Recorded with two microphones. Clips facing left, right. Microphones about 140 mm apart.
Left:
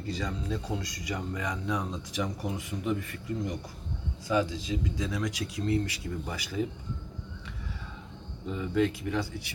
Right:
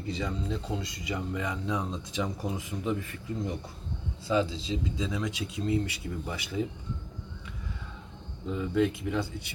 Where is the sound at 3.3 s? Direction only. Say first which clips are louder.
Even; 25° right (ahead or behind).